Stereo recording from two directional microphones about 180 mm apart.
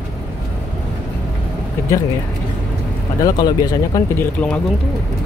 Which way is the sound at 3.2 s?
20° left (ahead or behind).